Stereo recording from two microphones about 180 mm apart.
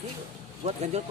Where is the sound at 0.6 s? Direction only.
35° right (ahead or behind).